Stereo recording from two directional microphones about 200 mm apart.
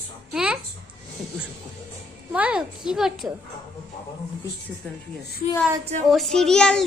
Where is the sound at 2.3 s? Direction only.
5° right (ahead or behind).